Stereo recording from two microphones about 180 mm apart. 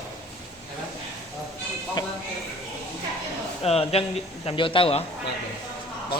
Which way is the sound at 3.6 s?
35° left (ahead or behind).